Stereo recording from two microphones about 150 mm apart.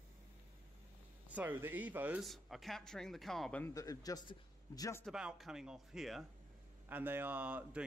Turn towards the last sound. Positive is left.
turn(degrees=-10)  # may be behind; listen again after turning